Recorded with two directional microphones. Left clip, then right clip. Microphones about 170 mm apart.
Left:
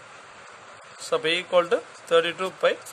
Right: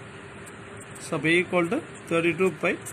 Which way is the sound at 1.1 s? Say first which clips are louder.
Left 2 dB; 90° left.